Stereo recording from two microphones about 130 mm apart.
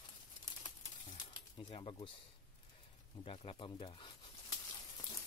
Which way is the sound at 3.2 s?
45° left (ahead or behind).